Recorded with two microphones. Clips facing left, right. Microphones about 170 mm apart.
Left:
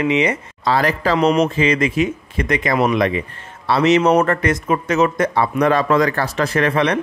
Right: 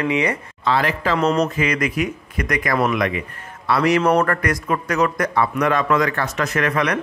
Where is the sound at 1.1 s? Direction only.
10° left (ahead or behind).